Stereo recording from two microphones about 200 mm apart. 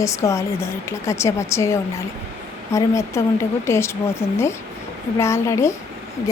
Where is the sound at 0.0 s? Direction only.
15° left (ahead or behind).